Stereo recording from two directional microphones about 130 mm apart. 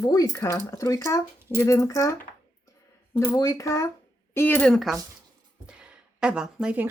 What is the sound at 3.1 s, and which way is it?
Speech, 25° left (ahead or behind).